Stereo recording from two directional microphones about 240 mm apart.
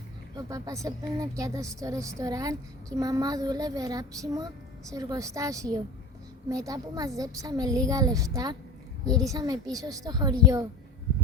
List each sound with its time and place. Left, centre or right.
0.3 s a woman's voice: centre